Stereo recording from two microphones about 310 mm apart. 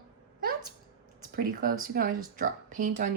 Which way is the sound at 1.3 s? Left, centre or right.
Right.